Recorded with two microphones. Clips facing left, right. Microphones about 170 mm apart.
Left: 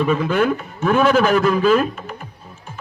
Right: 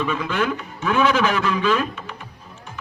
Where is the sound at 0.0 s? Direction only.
45° left (ahead or behind).